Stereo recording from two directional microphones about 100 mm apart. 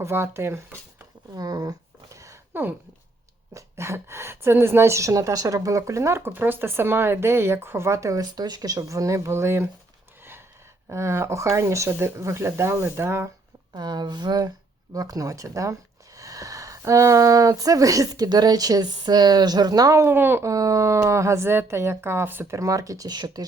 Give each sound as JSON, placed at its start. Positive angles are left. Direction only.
{"t": 0.0, "sound": "a woman's voice", "side_deg": -25}
{"t": 1.3, "sound": "speech", "side_deg": -35}
{"t": 2.1, "sound": "a sound", "side_deg": -30}
{"t": 2.5, "sound": "a woman's voice", "side_deg": -20}
{"t": 10.8, "sound": "a woman's voice", "side_deg": -25}
{"t": 13.7, "sound": "a woman's voice", "side_deg": -45}